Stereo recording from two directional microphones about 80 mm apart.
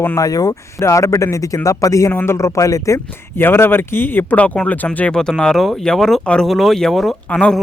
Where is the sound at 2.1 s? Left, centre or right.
Left.